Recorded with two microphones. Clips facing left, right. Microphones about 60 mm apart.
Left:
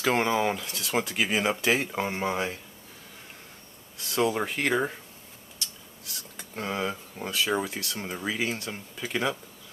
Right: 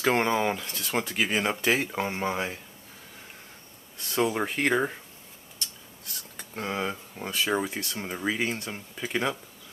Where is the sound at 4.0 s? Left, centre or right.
Centre.